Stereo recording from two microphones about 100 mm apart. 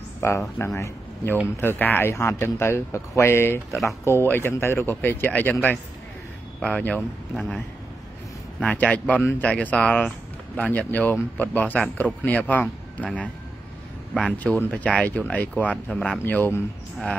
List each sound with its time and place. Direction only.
0.2 s speech: 25° left (ahead or behind); by 7.6 s centre (ahead or behind)
8.5 s speech: 15° left (ahead or behind)